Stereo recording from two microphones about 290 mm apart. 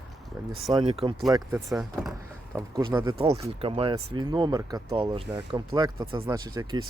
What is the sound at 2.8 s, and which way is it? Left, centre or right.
Speech, centre.